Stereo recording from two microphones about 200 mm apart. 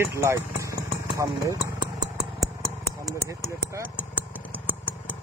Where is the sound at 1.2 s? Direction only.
20° right (ahead or behind).